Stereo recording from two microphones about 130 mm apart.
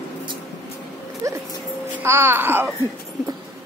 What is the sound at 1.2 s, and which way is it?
Dog, 25° right (ahead or behind).